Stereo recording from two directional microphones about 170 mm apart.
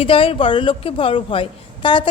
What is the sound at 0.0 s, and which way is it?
A woman's voice, 30° left (ahead or behind).